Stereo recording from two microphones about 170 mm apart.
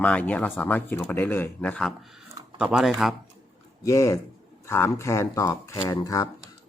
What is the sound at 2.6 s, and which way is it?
Speech, 5° right (ahead or behind).